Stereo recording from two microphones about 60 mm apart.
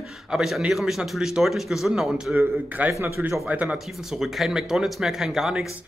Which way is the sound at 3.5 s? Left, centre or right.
Right.